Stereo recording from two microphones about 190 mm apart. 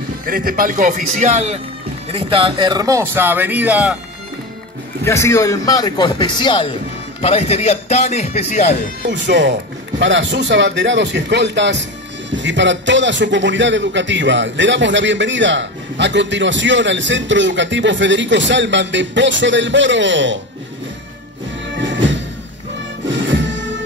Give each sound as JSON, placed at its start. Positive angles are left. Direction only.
{"t": 0.2, "sound": "speech", "side_deg": -50}
{"t": 5.0, "sound": "speech", "side_deg": 15}
{"t": 9.1, "sound": "a man's voice", "side_deg": -70}
{"t": 21.7, "sound": "music", "side_deg": -70}